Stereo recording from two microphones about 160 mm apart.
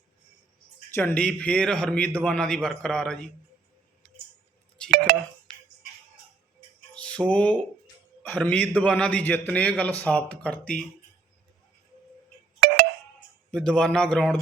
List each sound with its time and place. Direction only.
0.9 s a man's voice: 10° left (ahead or behind)
4.8 s a sound: 5° left (ahead or behind)
6.9 s music: 5° left (ahead or behind)
8.2 s speech: 10° left (ahead or behind)
12.5 s telephone dialing: 75° right (ahead or behind)
13.5 s a man's voice: 5° left (ahead or behind)